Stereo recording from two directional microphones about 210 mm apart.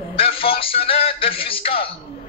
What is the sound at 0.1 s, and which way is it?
A man's voice, 25° left (ahead or behind).